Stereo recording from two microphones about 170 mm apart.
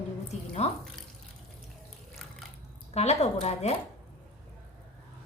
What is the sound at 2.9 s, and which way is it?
Speech, 40° left (ahead or behind).